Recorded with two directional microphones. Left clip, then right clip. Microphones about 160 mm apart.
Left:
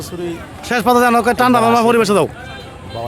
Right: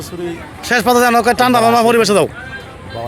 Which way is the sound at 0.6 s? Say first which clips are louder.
Right 1 dB; 15° left (ahead or behind).